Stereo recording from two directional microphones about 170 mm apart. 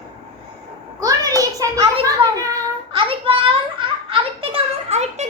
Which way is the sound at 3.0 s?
30° right (ahead or behind).